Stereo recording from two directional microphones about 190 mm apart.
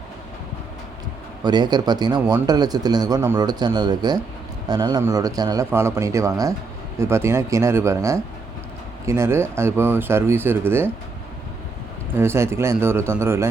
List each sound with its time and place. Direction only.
1.5 s speech: 20° right (ahead or behind)
12.1 s speech: 15° right (ahead or behind)